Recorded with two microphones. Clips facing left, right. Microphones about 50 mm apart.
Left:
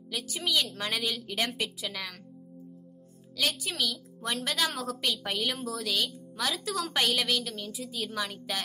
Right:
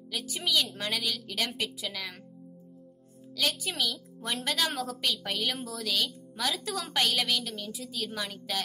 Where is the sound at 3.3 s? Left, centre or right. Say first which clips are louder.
Even; centre.